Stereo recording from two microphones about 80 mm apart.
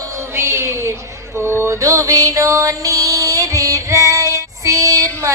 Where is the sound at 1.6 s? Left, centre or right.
Right.